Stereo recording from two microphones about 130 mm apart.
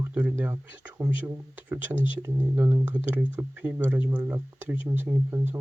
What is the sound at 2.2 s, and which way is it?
Speech, 20° right (ahead or behind).